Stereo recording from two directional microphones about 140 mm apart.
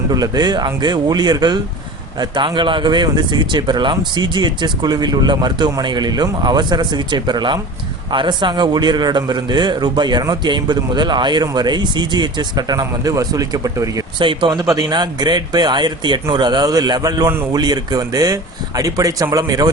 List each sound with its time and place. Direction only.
0.1 s a man's voice: 30° right (ahead or behind)
14.2 s a man's voice: 35° right (ahead or behind)